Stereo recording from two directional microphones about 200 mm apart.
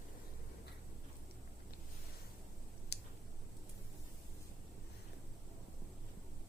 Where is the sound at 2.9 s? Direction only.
55° left (ahead or behind).